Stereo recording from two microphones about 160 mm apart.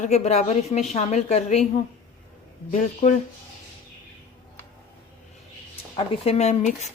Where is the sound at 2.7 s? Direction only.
50° left (ahead or behind).